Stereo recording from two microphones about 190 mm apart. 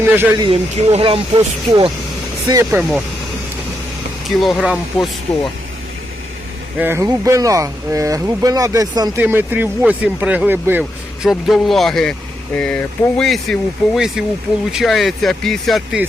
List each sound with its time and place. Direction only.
0.0 s speech: 10° right (ahead or behind)
0.3 s speech: 30° right (ahead or behind)
2.5 s speech: 15° right (ahead or behind)
4.4 s speech: 5° right (ahead or behind)
6.7 s speech: 10° right (ahead or behind)